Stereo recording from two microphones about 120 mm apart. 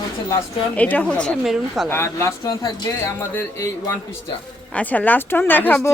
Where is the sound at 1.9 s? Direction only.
20° left (ahead or behind).